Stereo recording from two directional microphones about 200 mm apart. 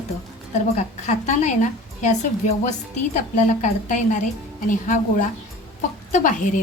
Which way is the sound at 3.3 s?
40° left (ahead or behind).